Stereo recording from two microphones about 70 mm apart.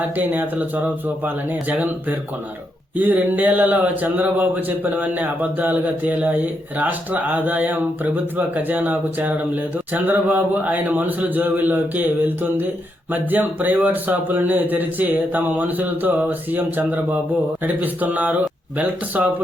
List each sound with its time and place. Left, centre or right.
0.2 s speech: right